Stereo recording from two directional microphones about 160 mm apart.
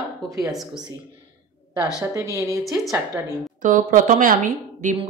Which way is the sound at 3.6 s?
55° right (ahead or behind).